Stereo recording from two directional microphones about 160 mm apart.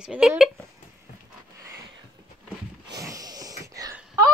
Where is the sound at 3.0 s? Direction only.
20° right (ahead or behind).